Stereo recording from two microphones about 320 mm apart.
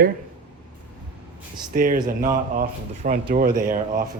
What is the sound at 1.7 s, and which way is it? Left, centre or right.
Speech, right.